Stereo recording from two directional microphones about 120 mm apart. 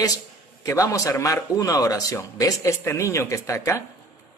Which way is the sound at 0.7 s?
25° left (ahead or behind).